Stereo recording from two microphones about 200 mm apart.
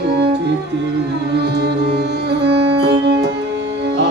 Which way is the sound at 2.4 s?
60° right (ahead or behind).